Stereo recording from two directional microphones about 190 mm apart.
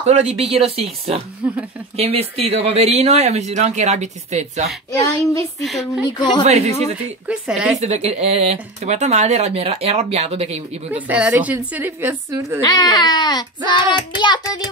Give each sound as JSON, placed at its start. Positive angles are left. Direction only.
{"t": 0.1, "sound": "speech", "side_deg": -30}
{"t": 1.4, "sound": "a woman's voice", "side_deg": -5}
{"t": 2.0, "sound": "speech", "side_deg": -30}
{"t": 5.6, "sound": "speech", "side_deg": 0}
{"t": 6.0, "sound": "child singing", "side_deg": 25}
{"t": 6.4, "sound": "speech", "side_deg": -35}
{"t": 7.2, "sound": "speech", "side_deg": -5}
{"t": 7.8, "sound": "speech", "side_deg": -35}
{"t": 10.9, "sound": "a woman's voice", "side_deg": -10}
{"t": 12.6, "sound": "child singing", "side_deg": 20}